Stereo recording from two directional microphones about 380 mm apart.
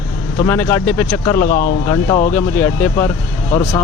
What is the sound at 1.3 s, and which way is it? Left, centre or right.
Speech, left.